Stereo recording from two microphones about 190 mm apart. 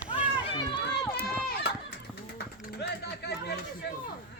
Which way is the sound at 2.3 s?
60° left (ahead or behind).